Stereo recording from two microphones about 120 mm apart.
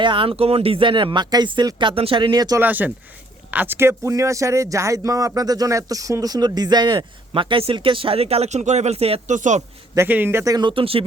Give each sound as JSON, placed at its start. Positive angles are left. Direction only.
{"t": 0.0, "sound": "speech", "side_deg": -45}
{"t": 2.6, "sound": "speech", "side_deg": -15}
{"t": 9.3, "sound": "a man's voice", "side_deg": -85}
{"t": 10.1, "sound": "speech", "side_deg": -20}
{"t": 10.7, "sound": "speech", "side_deg": -50}